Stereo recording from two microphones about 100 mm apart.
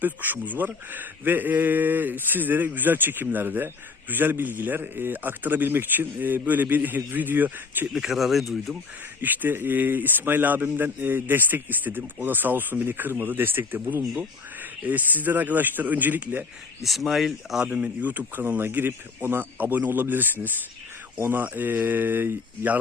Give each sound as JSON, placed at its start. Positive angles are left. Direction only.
{"t": 0.0, "sound": "a man's voice", "side_deg": -20}
{"t": 7.9, "sound": "speech", "side_deg": -5}
{"t": 9.2, "sound": "a man's voice", "side_deg": -20}
{"t": 16.8, "sound": "a man's voice", "side_deg": 0}